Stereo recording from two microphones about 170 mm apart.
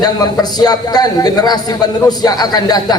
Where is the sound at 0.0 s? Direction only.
25° left (ahead or behind).